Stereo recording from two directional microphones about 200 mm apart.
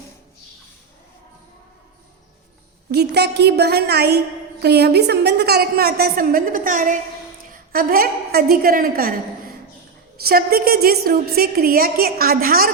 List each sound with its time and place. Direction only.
2.9 s a woman's voice: 55° right (ahead or behind)